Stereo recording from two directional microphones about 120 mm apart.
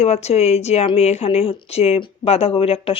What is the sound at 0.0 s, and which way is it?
A woman's voice, 65° left (ahead or behind).